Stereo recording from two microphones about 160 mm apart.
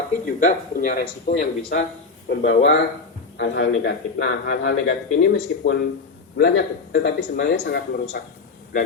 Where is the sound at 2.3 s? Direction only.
80° left; by 4.7 s 65° left (ahead or behind).